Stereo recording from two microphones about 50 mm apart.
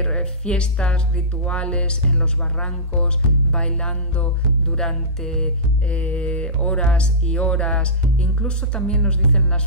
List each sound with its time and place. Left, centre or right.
0.0 s speech: centre
3.5 s music: left
5.9 s speech: left
8.9 s music: centre